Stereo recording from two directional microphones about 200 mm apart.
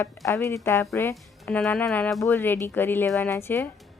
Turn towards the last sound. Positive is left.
turn(degrees=10)  # may be behind; listen again after turning